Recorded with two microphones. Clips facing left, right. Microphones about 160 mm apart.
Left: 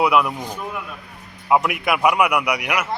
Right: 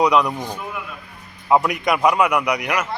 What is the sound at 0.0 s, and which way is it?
A man's voice, 5° left (ahead or behind).